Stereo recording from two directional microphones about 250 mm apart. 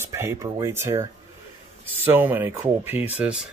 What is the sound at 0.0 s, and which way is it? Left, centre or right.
Speech, centre.